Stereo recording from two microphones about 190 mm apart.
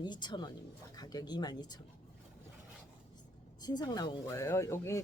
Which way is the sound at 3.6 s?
20° left (ahead or behind).